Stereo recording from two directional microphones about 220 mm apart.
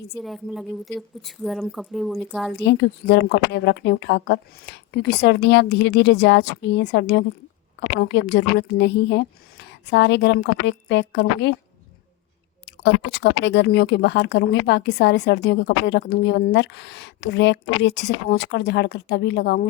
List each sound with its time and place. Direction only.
0.2 s a woman's voice: centre (ahead or behind)
2.6 s speech: 50° left (ahead or behind)
12.6 s speech: 50° left (ahead or behind)